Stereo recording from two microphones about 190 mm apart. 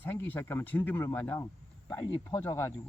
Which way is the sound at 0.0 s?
10° left (ahead or behind).